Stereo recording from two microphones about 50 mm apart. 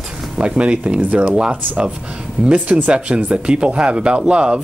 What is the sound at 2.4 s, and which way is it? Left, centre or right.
Speech, right.